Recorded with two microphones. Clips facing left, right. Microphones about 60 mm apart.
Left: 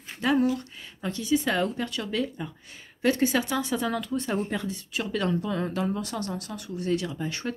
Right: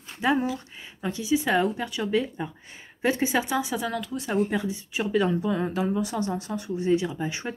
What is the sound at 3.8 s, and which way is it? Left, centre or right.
A woman's voice, centre.